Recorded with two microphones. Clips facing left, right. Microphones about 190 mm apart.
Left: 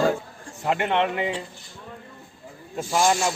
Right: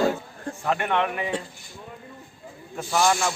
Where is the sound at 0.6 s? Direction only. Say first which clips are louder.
Left 2 dB; 20° left (ahead or behind).